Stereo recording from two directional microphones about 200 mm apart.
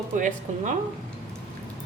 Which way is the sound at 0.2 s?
40° right (ahead or behind).